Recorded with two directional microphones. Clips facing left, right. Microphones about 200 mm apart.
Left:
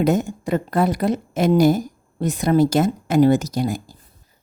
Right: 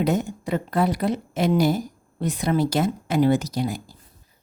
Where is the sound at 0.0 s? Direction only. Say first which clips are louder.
Left 4 dB; 45° left (ahead or behind).